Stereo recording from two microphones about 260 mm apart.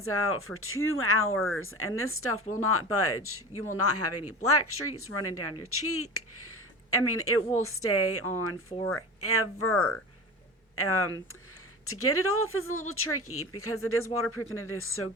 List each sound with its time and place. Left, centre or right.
0.0 s speech: left
1.4 s speech: centre
1.6 s speech: left
9.7 s speech: centre
10.8 s speech: left